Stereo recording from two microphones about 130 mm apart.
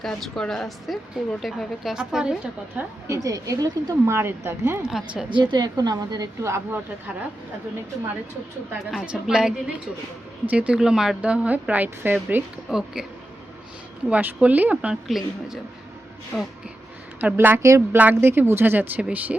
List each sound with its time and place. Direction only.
0.0 s a woman's voice: 5° left (ahead or behind)
3.1 s a woman's voice: 25° right (ahead or behind)
4.8 s a woman's voice: centre (ahead or behind)
5.4 s a woman's voice: 35° right (ahead or behind)
8.9 s a woman's voice: 5° right (ahead or behind)
12.7 s a woman's voice: 5° right (ahead or behind)
14.1 s a woman's voice: 10° right (ahead or behind)
16.3 s gasp: 10° left (ahead or behind)
17.2 s a woman's voice: 15° right (ahead or behind)